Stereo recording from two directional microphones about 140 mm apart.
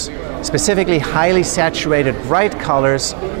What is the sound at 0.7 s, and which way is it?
Speech, 15° right (ahead or behind).